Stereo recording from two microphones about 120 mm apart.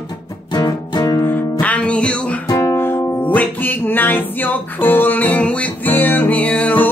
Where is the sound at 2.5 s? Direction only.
25° left (ahead or behind).